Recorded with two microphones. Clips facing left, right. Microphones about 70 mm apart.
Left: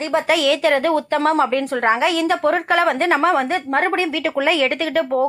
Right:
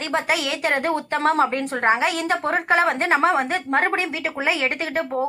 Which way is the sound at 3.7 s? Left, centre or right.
Left.